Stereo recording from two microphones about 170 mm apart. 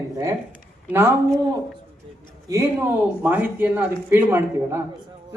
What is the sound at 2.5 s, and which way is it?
Speech, 15° right (ahead or behind).